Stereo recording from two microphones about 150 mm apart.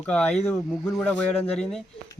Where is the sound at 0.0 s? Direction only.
5° left (ahead or behind).